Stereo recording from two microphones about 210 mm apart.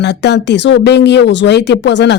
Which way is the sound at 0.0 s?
55° left (ahead or behind).